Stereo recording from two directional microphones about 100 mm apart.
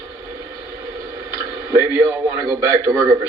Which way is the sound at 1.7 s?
30° right (ahead or behind).